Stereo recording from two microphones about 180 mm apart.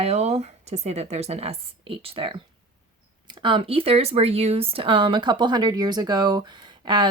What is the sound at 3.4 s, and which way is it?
Speech, 30° right (ahead or behind).